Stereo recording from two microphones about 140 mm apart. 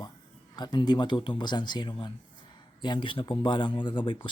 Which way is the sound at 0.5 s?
30° left (ahead or behind).